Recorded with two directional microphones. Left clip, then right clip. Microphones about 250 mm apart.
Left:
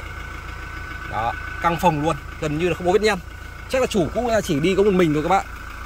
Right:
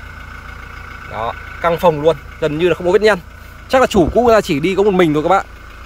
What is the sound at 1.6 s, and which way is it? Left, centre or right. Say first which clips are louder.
Speech: right 7 dB; centre.